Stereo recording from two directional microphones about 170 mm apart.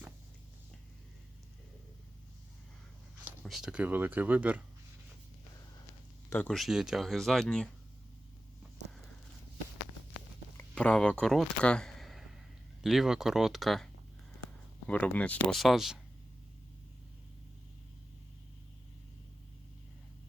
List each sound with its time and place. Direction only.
3.4 s speech: centre (ahead or behind)
6.3 s speech: 10° left (ahead or behind)
6.6 s speech: 5° right (ahead or behind)
10.8 s speech: 5° left (ahead or behind)
14.8 s speech: 10° left (ahead or behind)